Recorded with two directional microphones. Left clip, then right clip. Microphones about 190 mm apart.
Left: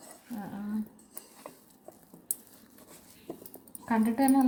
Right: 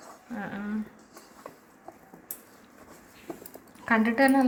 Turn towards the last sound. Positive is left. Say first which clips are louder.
# right 5 dB
turn(degrees=-5)  # may be behind; listen again after turning